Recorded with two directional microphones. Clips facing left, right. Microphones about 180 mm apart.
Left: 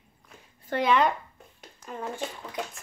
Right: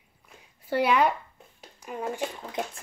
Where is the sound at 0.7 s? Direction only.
10° right (ahead or behind).